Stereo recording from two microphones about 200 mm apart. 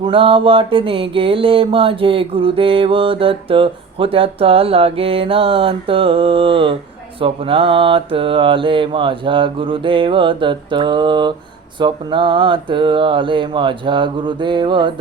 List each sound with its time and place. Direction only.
0.0 s mantra: 25° right (ahead or behind)